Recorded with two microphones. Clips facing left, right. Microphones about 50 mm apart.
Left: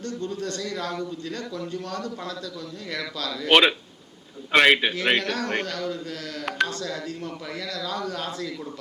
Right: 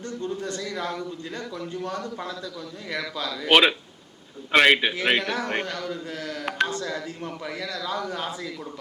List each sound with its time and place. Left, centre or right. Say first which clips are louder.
0.0 s speech: even; centre